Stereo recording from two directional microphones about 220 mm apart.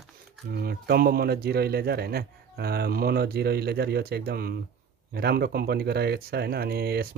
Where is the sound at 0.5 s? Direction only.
45° right (ahead or behind).